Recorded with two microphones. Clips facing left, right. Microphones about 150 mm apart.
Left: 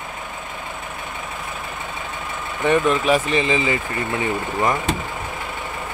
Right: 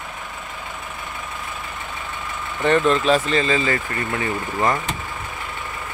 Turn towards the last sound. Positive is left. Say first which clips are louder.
# left 1 dB
turn(degrees=15)  # may be behind; listen again after turning